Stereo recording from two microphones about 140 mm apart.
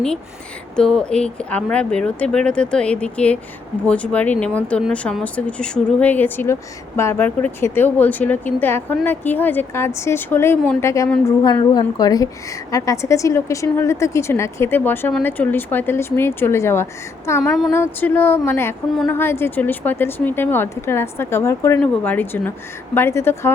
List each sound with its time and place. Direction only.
0.8 s a woman's voice: 5° left (ahead or behind); by 11.6 s 20° left (ahead or behind)
11.6 s a woman's voice: 30° left (ahead or behind)